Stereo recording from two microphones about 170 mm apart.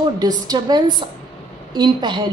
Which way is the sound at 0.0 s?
25° right (ahead or behind).